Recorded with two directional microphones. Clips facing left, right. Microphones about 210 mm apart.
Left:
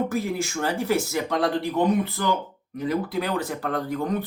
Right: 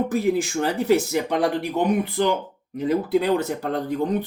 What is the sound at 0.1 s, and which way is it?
Speech, 15° right (ahead or behind).